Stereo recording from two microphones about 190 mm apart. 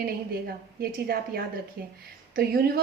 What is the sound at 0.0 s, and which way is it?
Speech, 55° right (ahead or behind).